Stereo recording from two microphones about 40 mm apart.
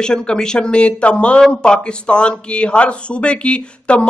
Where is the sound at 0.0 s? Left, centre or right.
Centre.